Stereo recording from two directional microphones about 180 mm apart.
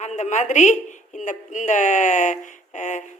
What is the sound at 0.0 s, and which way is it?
A woman's voice, 40° left (ahead or behind).